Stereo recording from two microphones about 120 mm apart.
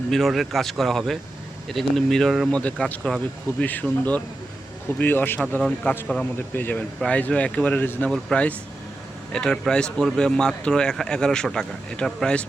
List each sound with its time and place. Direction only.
0.1 s speech: centre (ahead or behind)